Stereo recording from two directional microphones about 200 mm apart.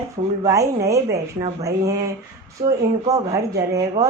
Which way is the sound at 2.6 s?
20° right (ahead or behind).